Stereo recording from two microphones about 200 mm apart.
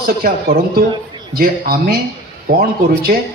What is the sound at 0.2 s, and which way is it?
A man's voice, 50° right (ahead or behind).